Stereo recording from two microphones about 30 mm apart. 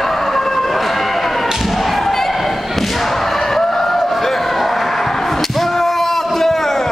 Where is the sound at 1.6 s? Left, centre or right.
Centre.